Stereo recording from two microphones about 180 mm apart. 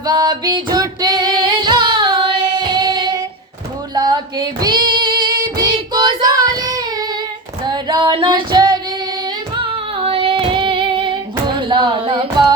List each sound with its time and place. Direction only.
0.0 s female singing: 25° right (ahead or behind)
5.5 s child singing: 25° right (ahead or behind)
7.7 s female singing: 25° right (ahead or behind)
11.6 s carnatic music: 25° right (ahead or behind)